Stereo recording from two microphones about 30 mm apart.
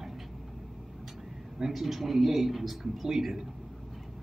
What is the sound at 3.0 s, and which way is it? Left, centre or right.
Speech, centre.